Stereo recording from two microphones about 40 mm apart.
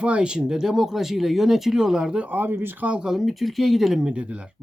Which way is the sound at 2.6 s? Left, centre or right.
Right.